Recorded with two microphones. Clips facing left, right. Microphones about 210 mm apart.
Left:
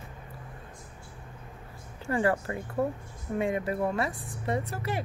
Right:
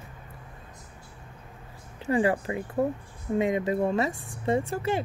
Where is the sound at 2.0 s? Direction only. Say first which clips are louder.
Right 3 dB; 15° right (ahead or behind).